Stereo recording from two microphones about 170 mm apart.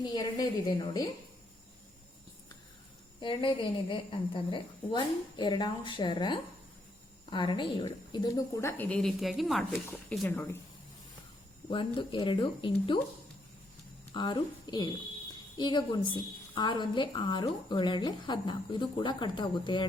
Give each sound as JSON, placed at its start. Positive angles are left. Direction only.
{"t": 0.0, "sound": "a woman's voice", "side_deg": 25}
{"t": 3.2, "sound": "a woman's voice", "side_deg": 30}
{"t": 10.1, "sound": "speech", "side_deg": 10}
{"t": 11.7, "sound": "a woman's voice", "side_deg": 30}
{"t": 14.1, "sound": "a woman's voice", "side_deg": 25}